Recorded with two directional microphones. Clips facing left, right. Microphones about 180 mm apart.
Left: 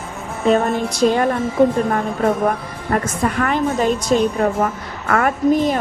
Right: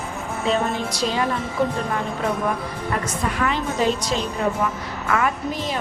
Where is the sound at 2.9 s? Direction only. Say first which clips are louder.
Left 7 dB; 50° left (ahead or behind).